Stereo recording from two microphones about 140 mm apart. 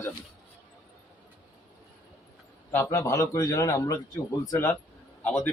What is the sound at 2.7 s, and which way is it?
Speech, 20° left (ahead or behind).